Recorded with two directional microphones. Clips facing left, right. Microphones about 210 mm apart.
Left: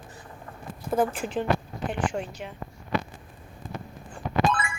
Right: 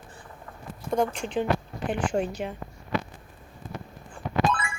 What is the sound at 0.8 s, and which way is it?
Speech, 5° left (ahead or behind).